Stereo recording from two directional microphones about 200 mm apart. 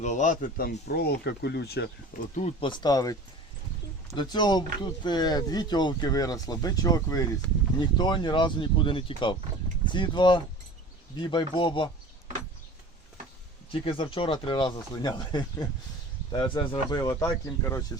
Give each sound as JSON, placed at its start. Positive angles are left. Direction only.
{"t": 0.0, "sound": "speech", "side_deg": 40}
{"t": 2.3, "sound": "speech", "side_deg": 30}
{"t": 13.7, "sound": "speech", "side_deg": 25}